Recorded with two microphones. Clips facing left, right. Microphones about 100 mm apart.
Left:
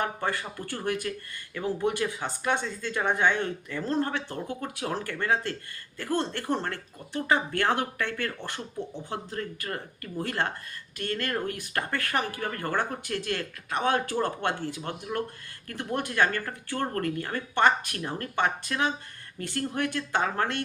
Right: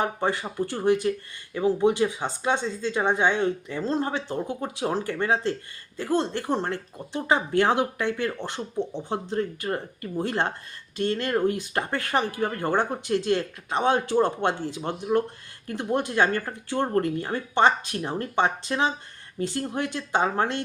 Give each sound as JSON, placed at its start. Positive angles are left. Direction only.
{"t": 0.0, "sound": "speech", "side_deg": -20}